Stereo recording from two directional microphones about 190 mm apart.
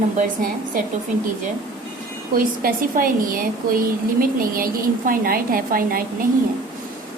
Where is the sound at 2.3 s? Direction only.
50° right (ahead or behind).